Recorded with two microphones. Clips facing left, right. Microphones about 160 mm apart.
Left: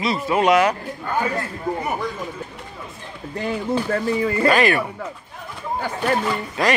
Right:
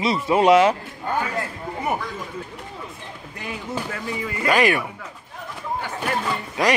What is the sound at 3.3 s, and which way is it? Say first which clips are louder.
Speech: left 8 dB; 35° left (ahead or behind).